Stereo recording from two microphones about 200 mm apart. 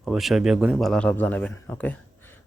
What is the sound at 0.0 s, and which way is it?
Speech, centre (ahead or behind).